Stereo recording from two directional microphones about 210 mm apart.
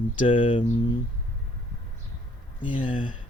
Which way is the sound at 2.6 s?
25° left (ahead or behind).